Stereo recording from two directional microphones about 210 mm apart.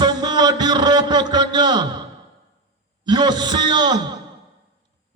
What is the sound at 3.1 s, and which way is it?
Speech, 20° right (ahead or behind).